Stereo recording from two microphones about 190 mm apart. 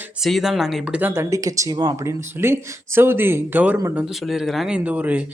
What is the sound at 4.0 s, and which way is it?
Speech, centre (ahead or behind).